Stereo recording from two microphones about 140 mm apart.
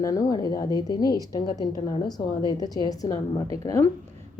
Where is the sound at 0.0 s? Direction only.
25° left (ahead or behind).